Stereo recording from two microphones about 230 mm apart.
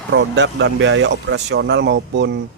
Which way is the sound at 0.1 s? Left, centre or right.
Right.